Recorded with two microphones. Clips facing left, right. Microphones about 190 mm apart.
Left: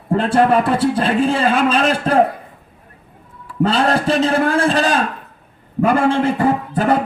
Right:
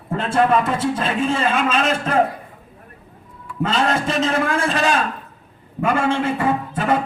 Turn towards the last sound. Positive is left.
turn(degrees=35)  # may be behind; listen again after turning